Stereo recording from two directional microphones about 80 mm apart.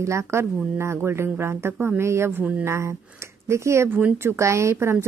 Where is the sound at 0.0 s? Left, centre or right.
Right.